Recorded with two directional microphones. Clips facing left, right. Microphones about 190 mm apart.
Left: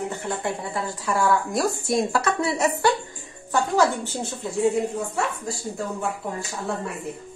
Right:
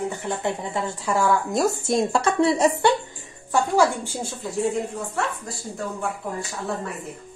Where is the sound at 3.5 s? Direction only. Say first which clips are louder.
Right 1 dB; 15° right (ahead or behind).